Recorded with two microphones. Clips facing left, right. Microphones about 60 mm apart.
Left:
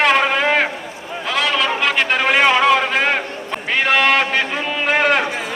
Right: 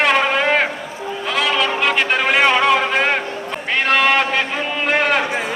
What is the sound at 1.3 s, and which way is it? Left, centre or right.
Brass instrument, centre.